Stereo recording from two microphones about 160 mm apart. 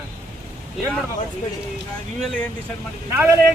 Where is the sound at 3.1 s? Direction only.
15° right (ahead or behind).